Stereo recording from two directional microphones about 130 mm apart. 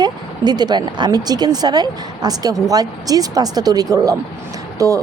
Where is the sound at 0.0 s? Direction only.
30° right (ahead or behind).